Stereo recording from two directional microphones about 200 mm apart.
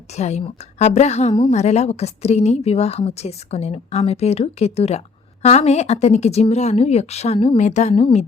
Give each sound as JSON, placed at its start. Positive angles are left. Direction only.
{"t": 0.2, "sound": "a woman's voice", "side_deg": 35}